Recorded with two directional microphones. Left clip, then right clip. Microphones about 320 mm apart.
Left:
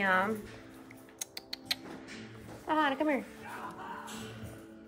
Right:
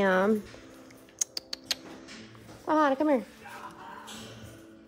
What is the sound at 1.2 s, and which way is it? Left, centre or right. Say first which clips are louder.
Music: right 8 dB; centre.